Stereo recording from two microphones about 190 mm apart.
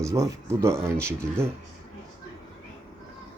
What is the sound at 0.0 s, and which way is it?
Speech, 15° right (ahead or behind).